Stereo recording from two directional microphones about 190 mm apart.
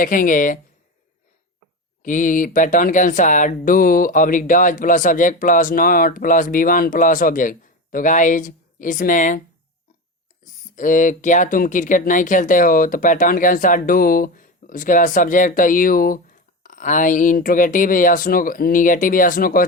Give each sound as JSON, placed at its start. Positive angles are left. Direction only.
{"t": 0.0, "sound": "speech", "side_deg": 45}
{"t": 2.0, "sound": "speech", "side_deg": 45}
{"t": 10.4, "sound": "speech", "side_deg": 45}